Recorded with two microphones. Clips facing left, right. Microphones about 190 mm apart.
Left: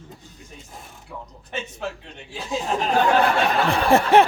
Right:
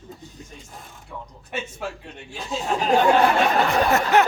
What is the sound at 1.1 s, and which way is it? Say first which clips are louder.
Speech: even; 5° left (ahead or behind).